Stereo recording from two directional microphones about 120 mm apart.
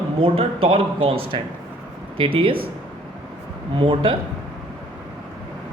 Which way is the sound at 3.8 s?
50° right (ahead or behind).